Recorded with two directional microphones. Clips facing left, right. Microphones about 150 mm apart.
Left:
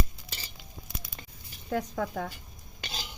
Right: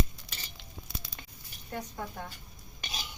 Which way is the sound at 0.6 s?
Centre (ahead or behind).